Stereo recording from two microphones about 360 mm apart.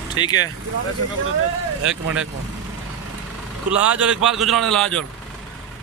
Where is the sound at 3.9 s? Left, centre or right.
Centre.